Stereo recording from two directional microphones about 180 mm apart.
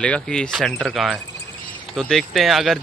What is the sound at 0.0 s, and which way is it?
Speech, 5° left (ahead or behind).